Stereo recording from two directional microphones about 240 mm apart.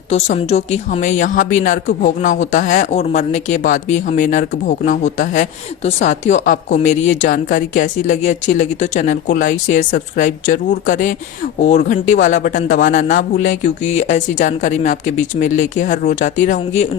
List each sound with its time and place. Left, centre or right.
0.1 s speech: left